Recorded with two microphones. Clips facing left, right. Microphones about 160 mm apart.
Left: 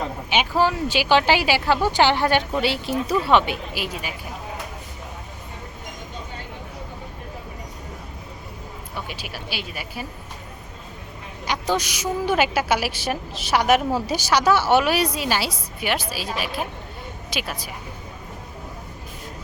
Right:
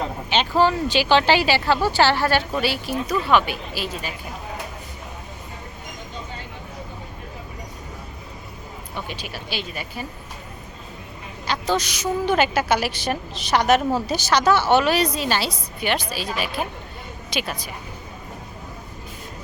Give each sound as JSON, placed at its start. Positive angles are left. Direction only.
{"t": 0.3, "sound": "a woman's voice", "side_deg": 10}
{"t": 9.0, "sound": "a woman's voice", "side_deg": 10}
{"t": 11.4, "sound": "a woman's voice", "side_deg": 15}